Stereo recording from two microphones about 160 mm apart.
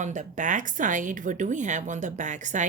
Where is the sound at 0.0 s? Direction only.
50° right (ahead or behind).